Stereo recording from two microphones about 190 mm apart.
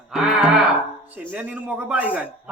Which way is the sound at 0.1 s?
Centre (ahead or behind).